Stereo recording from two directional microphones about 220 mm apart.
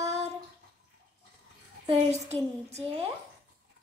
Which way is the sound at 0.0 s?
30° right (ahead or behind).